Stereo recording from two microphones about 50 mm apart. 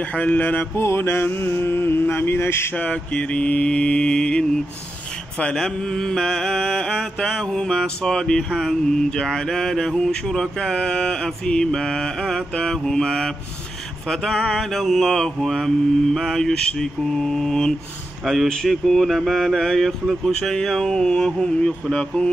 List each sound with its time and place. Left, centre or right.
0.1 s mantra: left
0.7 s mantra: left
2.7 s mantra: left
18.2 s speech: centre
18.7 s mantra: centre; by 22.3 s left